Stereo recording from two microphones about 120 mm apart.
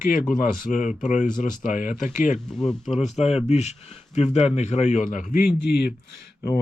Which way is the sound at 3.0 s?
65° left (ahead or behind).